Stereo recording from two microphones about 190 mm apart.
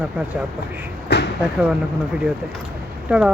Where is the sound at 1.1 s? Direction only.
60° left (ahead or behind).